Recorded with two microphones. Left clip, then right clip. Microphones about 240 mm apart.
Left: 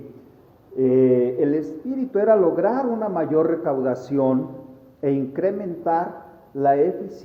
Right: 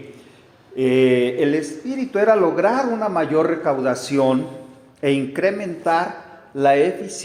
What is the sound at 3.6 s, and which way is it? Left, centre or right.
Speech, right.